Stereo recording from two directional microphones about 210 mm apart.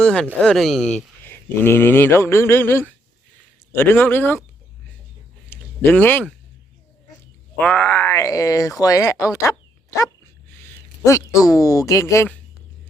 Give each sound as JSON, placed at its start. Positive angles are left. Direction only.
{"t": 0.0, "sound": "speech", "side_deg": 5}
{"t": 5.5, "sound": "a sound", "side_deg": 10}
{"t": 7.6, "sound": "a woman's voice", "side_deg": 5}